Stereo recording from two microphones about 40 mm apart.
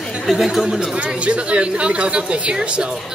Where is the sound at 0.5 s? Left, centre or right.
Centre.